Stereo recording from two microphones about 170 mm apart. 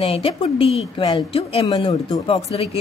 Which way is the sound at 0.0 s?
35° left (ahead or behind).